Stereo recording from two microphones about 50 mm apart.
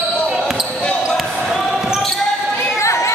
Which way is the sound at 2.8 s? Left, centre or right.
Left.